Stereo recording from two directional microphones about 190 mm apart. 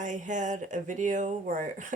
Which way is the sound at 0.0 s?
40° right (ahead or behind).